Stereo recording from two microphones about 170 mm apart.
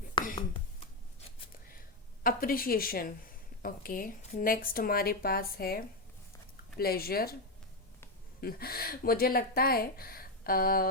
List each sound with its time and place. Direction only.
2.2 s speech: 60° left (ahead or behind)
8.4 s speech: 60° left (ahead or behind)